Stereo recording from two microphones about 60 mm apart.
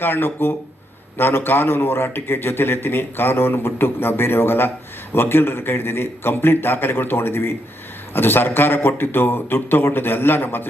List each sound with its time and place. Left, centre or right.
0.0 s a man's voice: left